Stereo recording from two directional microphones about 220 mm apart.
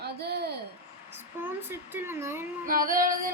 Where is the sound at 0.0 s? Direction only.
50° right (ahead or behind).